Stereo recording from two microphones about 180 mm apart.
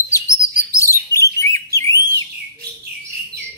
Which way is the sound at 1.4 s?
15° left (ahead or behind).